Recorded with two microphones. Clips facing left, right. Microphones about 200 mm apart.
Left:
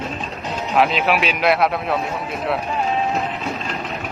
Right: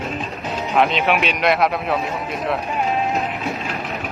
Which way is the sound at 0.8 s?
Centre (ahead or behind).